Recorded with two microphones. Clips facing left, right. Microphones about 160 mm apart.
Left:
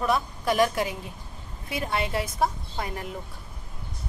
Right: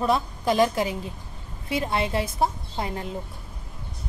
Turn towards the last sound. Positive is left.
turn(degrees=-25)  # may be behind; listen again after turning